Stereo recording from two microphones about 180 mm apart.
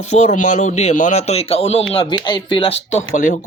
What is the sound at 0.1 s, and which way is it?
Speech, 40° left (ahead or behind).